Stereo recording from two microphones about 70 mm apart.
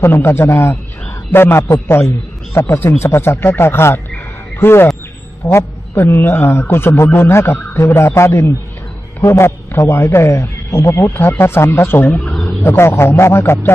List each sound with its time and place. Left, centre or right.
0.0 s a man's voice: left
12.2 s fowl: centre
12.6 s a man's voice: left